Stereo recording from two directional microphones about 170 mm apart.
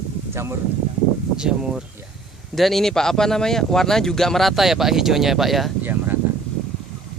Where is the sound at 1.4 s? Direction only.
5° right (ahead or behind).